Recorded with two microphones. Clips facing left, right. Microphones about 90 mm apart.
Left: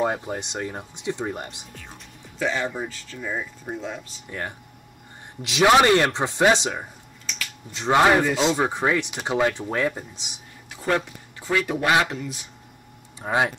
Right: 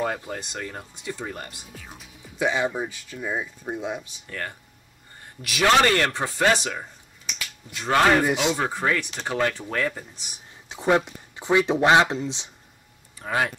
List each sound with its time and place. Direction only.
0.0 s speech: 20° left (ahead or behind)
1.7 s speech: 5° right (ahead or behind)
4.3 s speech: 15° left (ahead or behind)
10.7 s speech: 20° right (ahead or behind)
13.2 s speech: 20° left (ahead or behind)